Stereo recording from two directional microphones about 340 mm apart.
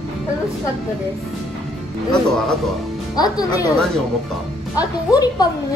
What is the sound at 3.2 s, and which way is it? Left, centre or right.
Speech, centre.